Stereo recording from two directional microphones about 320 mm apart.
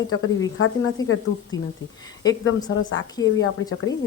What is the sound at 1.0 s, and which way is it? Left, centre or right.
Speech, centre.